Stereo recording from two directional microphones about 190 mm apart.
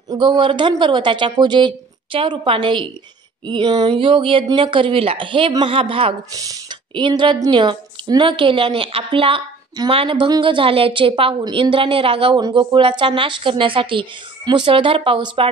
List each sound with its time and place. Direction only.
0.1 s speech: 25° right (ahead or behind)